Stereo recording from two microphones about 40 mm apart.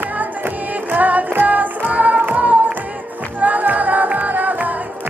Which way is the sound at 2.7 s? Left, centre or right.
Right.